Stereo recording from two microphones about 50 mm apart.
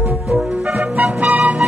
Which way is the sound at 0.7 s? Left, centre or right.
Right.